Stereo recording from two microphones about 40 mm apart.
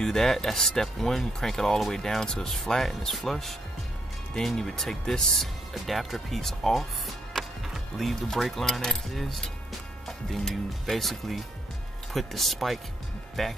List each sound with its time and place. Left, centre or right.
0.0 s speech: centre
7.3 s music: centre
8.3 s speech: centre